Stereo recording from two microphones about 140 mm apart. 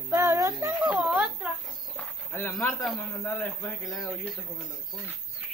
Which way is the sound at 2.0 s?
15° left (ahead or behind).